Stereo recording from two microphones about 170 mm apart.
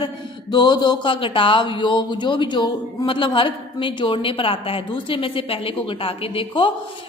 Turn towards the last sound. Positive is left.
turn(degrees=30)  # may be behind; listen again after turning